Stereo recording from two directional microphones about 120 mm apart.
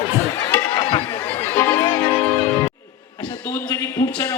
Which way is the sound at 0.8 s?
50° left (ahead or behind).